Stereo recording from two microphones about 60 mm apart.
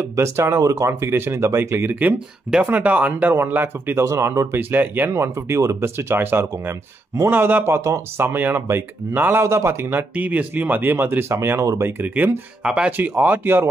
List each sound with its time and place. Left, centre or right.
0.0 s speech: right
0.6 s speech: right
1.1 s speech: right
2.1 s speech: centre
2.7 s speech: right
4.0 s speech: right
4.6 s speech: right
5.1 s speech: right
7.6 s speech: right
8.2 s speech: right
9.4 s speech: right
12.6 s speech: centre
12.9 s speech: right